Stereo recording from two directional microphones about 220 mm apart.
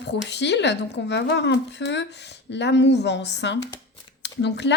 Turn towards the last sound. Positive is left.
turn(degrees=50)  # may be behind; listen again after turning